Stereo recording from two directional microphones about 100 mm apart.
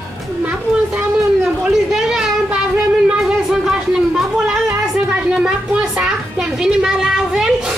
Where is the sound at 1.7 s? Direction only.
5° right (ahead or behind).